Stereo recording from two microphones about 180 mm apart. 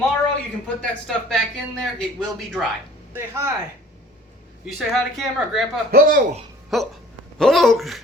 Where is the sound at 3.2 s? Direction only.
15° right (ahead or behind).